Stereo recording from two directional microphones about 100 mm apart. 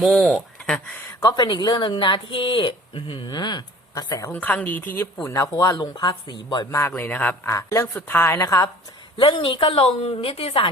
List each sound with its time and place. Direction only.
0.0 s speech: centre (ahead or behind)
0.6 s speech: 10° left (ahead or behind)
1.2 s a woman's voice: 50° left (ahead or behind)
3.2 s speech: 45° left (ahead or behind)
4.3 s a woman's voice: 15° left (ahead or behind)
5.2 s a woman's voice: 30° left (ahead or behind); by 6.7 s 45° left (ahead or behind)
6.7 s speech: 25° left (ahead or behind)
7.4 s speech: 30° left (ahead or behind)
8.4 s speech: 35° left (ahead or behind)
9.1 s a woman's voice: 55° left (ahead or behind); by 10.7 s 75° left (ahead or behind)